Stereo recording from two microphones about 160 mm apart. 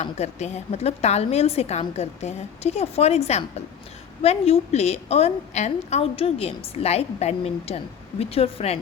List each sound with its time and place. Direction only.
0.0 s a woman's voice: 45° left (ahead or behind)